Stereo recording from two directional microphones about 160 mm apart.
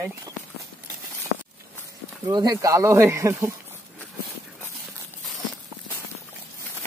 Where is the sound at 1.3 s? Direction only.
90° left.